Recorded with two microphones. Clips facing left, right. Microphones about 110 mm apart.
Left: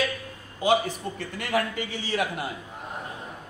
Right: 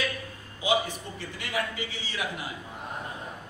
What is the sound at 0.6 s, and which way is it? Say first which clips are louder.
A man's voice: left 4 dB; 55° left (ahead or behind).